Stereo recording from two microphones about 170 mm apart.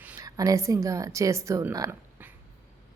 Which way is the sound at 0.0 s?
10° right (ahead or behind).